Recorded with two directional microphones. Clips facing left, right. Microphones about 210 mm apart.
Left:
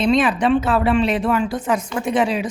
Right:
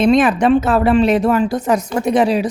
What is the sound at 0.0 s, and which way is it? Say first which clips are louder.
Speech: right 4 dB; 50° right (ahead or behind).